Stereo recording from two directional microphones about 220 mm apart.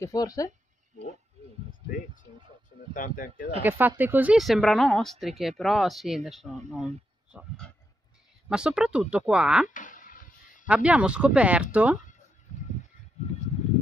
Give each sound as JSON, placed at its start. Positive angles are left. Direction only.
{"t": 0.0, "sound": "speech", "side_deg": 15}
{"t": 2.9, "sound": "speech", "side_deg": 40}
{"t": 3.6, "sound": "speech", "side_deg": -10}
{"t": 9.8, "sound": "a sound", "side_deg": 35}
{"t": 10.7, "sound": "speech", "side_deg": -5}
{"t": 13.2, "sound": "a sound", "side_deg": 30}